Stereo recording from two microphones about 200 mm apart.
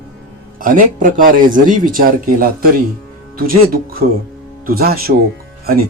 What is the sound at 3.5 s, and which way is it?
Speech, 45° right (ahead or behind).